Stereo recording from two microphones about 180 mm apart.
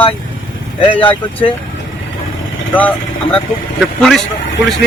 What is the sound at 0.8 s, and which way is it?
Speech, 30° left (ahead or behind).